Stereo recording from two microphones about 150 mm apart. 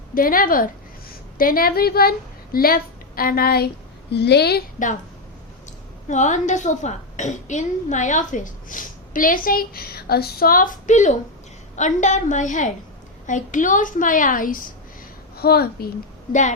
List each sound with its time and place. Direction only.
0.1 s a woman's voice: 70° left (ahead or behind)
6.1 s a woman's voice: 55° left (ahead or behind)
15.4 s a woman's voice: 90° left
16.3 s a woman's voice: 55° left (ahead or behind)